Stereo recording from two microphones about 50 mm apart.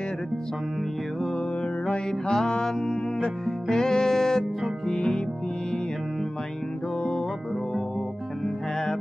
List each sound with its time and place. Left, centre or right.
1.9 s music: centre
7.0 s music: centre